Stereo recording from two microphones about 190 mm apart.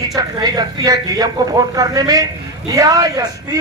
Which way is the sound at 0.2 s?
20° right (ahead or behind).